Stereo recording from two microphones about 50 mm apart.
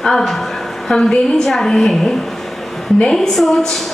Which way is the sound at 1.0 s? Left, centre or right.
Centre.